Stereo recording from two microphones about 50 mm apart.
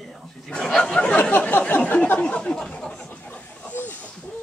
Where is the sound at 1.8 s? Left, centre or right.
Left.